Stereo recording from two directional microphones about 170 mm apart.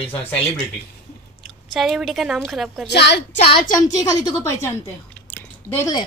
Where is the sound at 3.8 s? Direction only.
20° left (ahead or behind).